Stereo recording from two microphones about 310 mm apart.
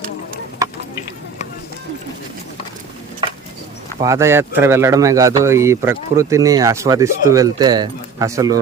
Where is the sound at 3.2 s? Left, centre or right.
Centre.